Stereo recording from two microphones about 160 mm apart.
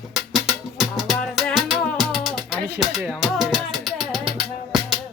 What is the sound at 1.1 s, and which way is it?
Music, centre (ahead or behind).